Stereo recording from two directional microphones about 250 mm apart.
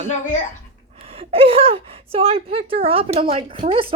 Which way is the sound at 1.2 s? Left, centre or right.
Right.